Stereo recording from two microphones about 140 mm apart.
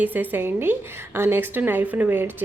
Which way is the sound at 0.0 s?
15° right (ahead or behind).